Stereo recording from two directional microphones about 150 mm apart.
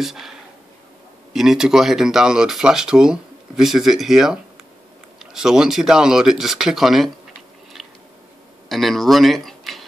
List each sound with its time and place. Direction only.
0.0 s speech: centre (ahead or behind)
7.7 s a sound: centre (ahead or behind)
8.6 s speech: centre (ahead or behind)